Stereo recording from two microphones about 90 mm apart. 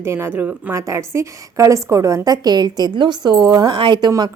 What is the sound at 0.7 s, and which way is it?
A woman's voice, 35° right (ahead or behind).